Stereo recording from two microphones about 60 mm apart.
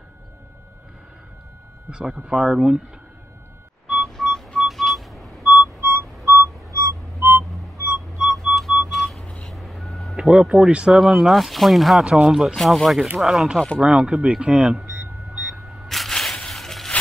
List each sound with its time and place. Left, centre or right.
1.9 s speech: centre
3.9 s music: centre
5.8 s music: right
6.7 s music: right
8.5 s music: centre
9.2 s vehicle: centre
9.5 s reversing beeps: centre
10.1 s speech: centre
11.0 s speech: centre
12.0 s speech: centre
12.5 s speech: centre
15.3 s single-lens reflex camera: centre